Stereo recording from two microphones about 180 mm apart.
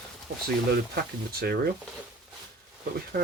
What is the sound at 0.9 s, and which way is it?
Speech, 60° right (ahead or behind).